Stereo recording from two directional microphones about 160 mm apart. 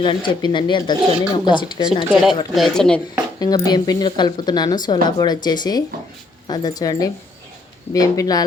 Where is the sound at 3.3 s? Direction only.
25° left (ahead or behind).